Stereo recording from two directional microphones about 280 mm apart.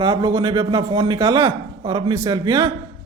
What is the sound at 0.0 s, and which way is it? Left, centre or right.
A man's voice, centre.